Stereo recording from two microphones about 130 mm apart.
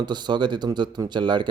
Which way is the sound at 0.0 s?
35° right (ahead or behind).